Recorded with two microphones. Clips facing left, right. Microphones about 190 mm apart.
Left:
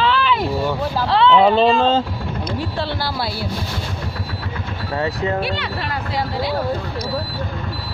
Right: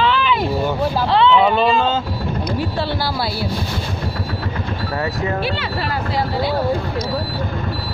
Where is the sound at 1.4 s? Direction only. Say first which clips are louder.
Left 2 dB; 30° left (ahead or behind).